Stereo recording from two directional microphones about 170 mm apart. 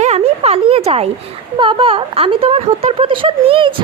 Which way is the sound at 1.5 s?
30° right (ahead or behind).